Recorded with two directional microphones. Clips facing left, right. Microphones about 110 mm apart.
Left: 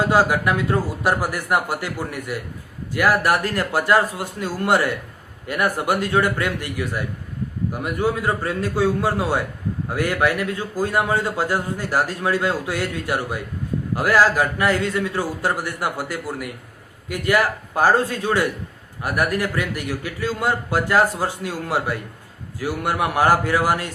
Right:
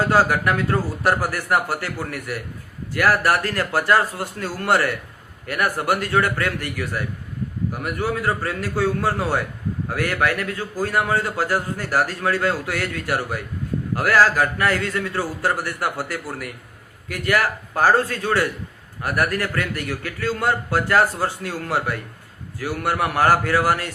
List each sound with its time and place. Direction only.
0.1 s a man's voice: 15° left (ahead or behind)